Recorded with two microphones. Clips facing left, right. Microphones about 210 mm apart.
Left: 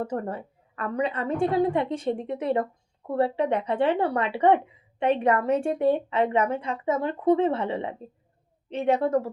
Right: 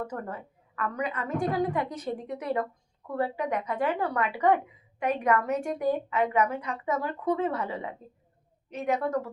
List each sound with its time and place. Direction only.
0.0 s speech: 30° left (ahead or behind)